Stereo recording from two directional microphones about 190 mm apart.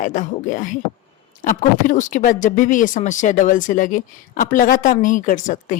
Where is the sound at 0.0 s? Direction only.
40° left (ahead or behind).